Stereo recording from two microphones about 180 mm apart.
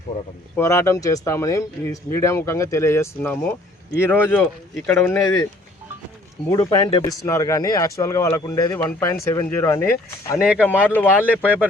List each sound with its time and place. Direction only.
0.5 s speech: 15° left (ahead or behind)
6.5 s speech: 20° left (ahead or behind)
11.3 s speech: 10° right (ahead or behind)